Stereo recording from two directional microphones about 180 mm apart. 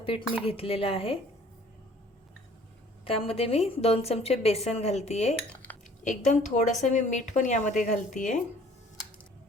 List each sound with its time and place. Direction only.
0.4 s speech: 30° left (ahead or behind)
3.0 s speech: 30° left (ahead or behind)